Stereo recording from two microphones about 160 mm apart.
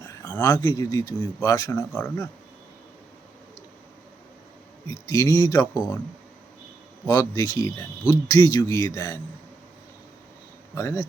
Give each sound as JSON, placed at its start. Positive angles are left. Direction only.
{"t": 0.3, "sound": "a sound", "side_deg": 10}
{"t": 0.5, "sound": "speech", "side_deg": 25}
{"t": 4.9, "sound": "speech", "side_deg": 20}
{"t": 7.1, "sound": "speech", "side_deg": 20}
{"t": 10.8, "sound": "speech", "side_deg": 15}